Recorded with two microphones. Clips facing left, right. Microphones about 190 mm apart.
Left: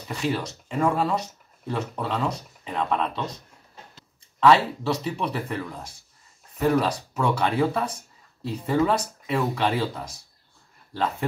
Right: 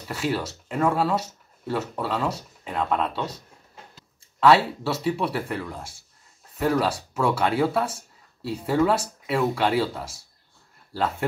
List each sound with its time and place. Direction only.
0.1 s speech: 5° right (ahead or behind)
4.4 s speech: 5° right (ahead or behind)